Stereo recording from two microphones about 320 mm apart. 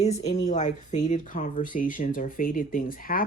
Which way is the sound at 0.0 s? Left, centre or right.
Left.